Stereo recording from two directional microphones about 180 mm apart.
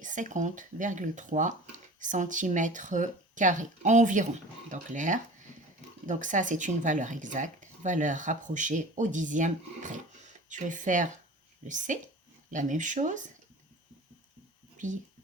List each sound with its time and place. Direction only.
0.0 s speech: 45° right (ahead or behind)